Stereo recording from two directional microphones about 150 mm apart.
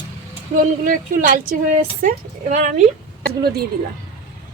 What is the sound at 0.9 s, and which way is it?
Speech, 65° right (ahead or behind).